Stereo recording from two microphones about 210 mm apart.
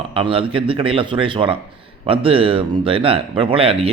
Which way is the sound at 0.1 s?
25° right (ahead or behind).